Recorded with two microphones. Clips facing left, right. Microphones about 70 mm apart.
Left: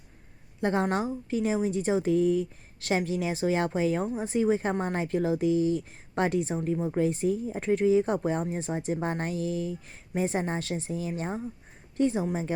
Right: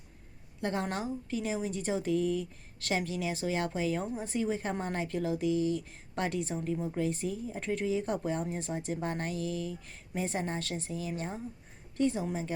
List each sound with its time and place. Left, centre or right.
0.6 s a woman's voice: left